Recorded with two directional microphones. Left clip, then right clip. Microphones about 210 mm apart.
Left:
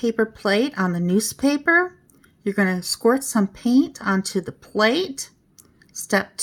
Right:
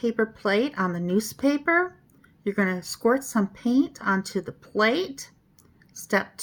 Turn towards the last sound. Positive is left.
turn(degrees=45)  # may be behind; listen again after turning